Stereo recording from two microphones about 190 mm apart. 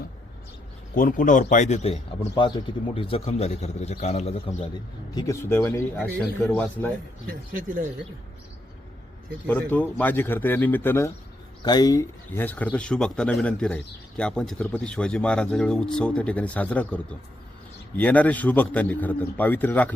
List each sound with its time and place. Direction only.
0.9 s a man's voice: 45° left (ahead or behind)
5.1 s a man's voice: 15° left (ahead or behind)
7.3 s speech: 45° right (ahead or behind)
9.5 s a man's voice: 10° left (ahead or behind)